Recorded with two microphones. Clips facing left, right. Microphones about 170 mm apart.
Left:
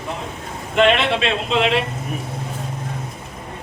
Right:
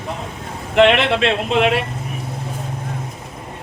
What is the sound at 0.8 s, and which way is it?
Speech, 60° right (ahead or behind).